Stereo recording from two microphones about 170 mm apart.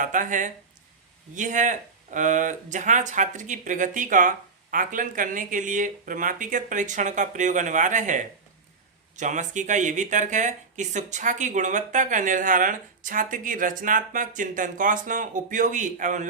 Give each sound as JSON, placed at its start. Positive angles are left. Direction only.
{"t": 0.0, "sound": "speech", "side_deg": -50}